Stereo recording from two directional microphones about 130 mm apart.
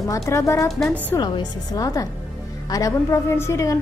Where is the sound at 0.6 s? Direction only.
Centre (ahead or behind).